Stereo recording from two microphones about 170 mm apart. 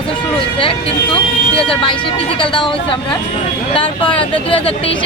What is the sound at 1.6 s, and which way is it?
Speech, 30° left (ahead or behind).